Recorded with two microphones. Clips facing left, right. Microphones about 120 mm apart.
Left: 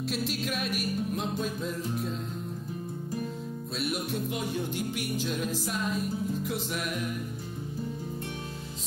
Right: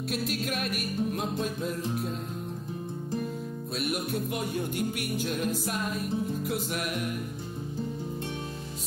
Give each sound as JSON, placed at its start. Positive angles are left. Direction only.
{"t": 0.5, "sound": "music", "side_deg": 0}
{"t": 3.8, "sound": "music", "side_deg": 0}
{"t": 4.9, "sound": "music", "side_deg": -55}
{"t": 5.7, "sound": "music", "side_deg": 0}